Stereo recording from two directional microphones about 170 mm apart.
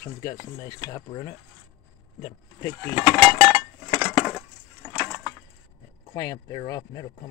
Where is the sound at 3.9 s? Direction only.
10° left (ahead or behind).